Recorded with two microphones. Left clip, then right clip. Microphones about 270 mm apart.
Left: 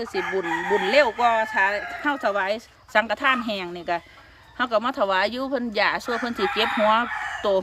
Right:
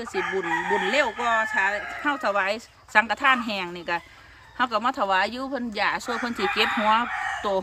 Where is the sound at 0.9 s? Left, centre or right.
Centre.